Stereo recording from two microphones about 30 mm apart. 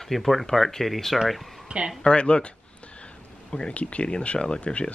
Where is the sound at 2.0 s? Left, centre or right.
Left.